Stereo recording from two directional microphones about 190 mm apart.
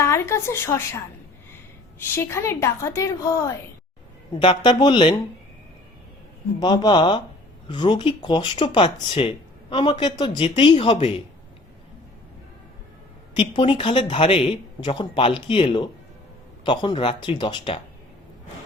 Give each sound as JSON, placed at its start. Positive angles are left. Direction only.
{"t": 0.0, "sound": "a woman's voice", "side_deg": 15}
{"t": 6.6, "sound": "speech", "side_deg": 25}
{"t": 13.3, "sound": "speech", "side_deg": 25}